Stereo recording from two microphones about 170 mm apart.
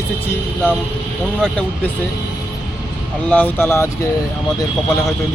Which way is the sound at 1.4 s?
5° left (ahead or behind).